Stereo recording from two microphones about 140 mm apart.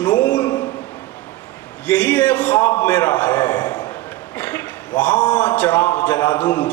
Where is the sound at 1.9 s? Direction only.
10° left (ahead or behind).